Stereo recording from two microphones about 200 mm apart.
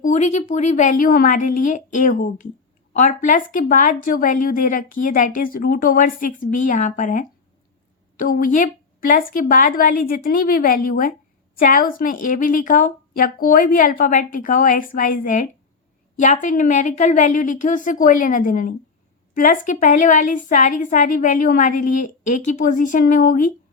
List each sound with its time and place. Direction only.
0.0 s a woman's voice: 35° left (ahead or behind)